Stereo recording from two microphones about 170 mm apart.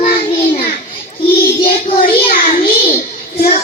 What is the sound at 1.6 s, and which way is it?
Child singing, 55° left (ahead or behind).